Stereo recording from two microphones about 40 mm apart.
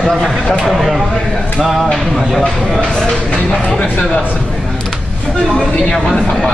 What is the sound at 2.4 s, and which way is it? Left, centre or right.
Speech, left.